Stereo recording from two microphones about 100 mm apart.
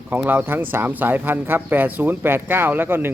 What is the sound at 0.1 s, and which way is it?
Speech, 15° right (ahead or behind).